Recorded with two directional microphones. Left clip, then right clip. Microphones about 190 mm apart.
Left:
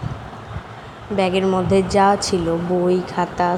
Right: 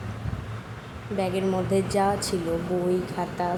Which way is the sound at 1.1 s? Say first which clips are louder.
Left 8 dB; 20° left (ahead or behind).